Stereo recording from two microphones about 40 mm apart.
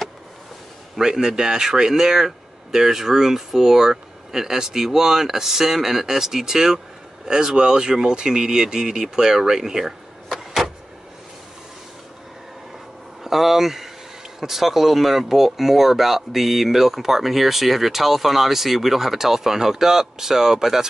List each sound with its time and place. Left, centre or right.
0.9 s speech: centre
9.1 s vehicle: centre
13.2 s speech: centre